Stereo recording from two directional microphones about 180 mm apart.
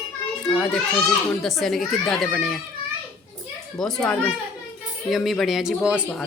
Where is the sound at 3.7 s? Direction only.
Centre (ahead or behind).